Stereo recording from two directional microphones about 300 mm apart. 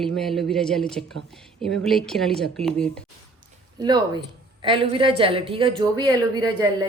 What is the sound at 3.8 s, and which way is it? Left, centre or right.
Speech, centre.